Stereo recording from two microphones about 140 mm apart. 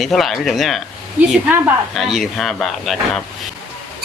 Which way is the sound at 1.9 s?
Centre (ahead or behind).